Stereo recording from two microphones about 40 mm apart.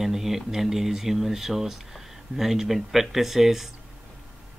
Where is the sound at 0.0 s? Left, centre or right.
Centre.